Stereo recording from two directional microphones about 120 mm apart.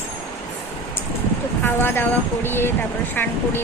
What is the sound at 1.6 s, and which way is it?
Speech, 20° left (ahead or behind).